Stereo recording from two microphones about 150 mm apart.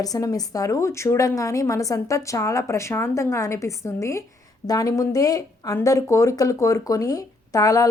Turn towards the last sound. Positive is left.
turn(degrees=25)  # may be behind; listen again after turning